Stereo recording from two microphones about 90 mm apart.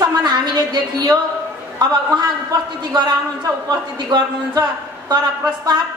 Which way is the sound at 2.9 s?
45° right (ahead or behind).